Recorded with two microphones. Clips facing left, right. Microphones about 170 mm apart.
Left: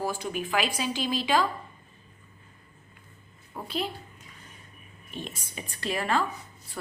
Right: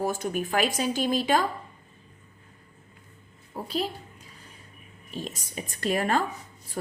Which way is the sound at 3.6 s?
40° right (ahead or behind).